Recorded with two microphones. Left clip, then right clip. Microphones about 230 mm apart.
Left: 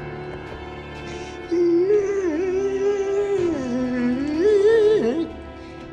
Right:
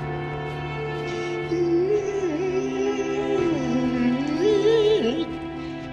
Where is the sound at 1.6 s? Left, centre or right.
Left.